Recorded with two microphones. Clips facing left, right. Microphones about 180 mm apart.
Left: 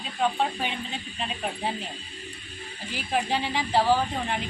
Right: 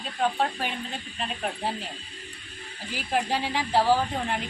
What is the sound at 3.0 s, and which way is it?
Speech, 10° right (ahead or behind).